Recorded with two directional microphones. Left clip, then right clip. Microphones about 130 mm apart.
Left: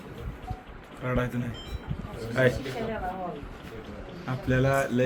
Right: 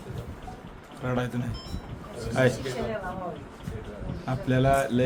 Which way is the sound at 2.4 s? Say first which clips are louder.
Even; 40° right (ahead or behind).